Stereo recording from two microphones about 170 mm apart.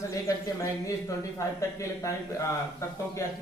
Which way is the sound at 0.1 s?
20° left (ahead or behind).